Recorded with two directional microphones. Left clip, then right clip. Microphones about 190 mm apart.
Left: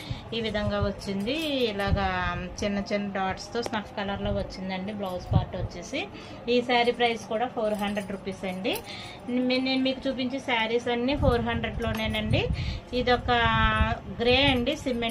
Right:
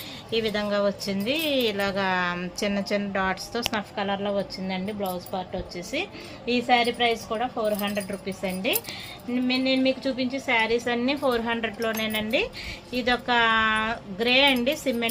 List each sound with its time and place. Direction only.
0.3 s speech: 60° right (ahead or behind)
5.9 s a woman's voice: 55° right (ahead or behind)